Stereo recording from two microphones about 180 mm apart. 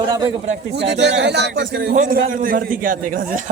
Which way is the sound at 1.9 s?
45° right (ahead or behind).